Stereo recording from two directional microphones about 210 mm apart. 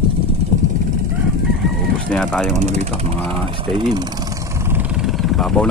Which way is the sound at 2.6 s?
30° right (ahead or behind).